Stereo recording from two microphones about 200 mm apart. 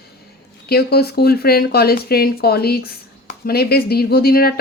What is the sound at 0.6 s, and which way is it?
Speech, 50° left (ahead or behind).